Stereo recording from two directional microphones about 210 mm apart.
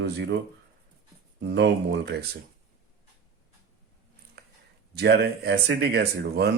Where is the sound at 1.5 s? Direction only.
55° right (ahead or behind).